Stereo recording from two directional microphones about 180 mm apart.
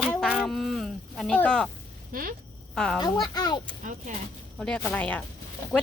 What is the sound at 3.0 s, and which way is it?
Speech, 25° left (ahead or behind).